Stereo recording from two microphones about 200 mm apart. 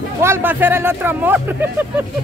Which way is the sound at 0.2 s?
10° right (ahead or behind).